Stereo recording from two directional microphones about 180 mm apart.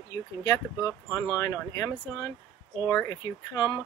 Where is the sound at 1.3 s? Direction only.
15° left (ahead or behind).